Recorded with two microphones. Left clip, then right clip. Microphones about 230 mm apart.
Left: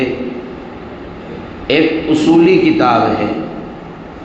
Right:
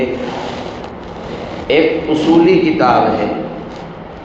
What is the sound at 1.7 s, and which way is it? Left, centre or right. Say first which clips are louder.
A man's voice: even; left.